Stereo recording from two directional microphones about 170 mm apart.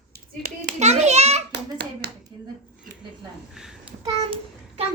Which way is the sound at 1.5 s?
90° right.